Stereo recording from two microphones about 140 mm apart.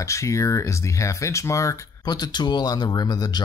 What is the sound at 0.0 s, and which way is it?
Speech, 20° left (ahead or behind).